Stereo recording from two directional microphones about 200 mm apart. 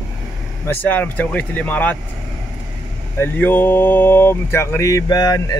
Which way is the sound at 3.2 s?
10° left (ahead or behind).